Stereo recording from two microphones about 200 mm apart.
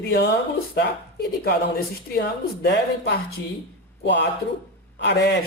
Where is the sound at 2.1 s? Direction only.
55° left (ahead or behind).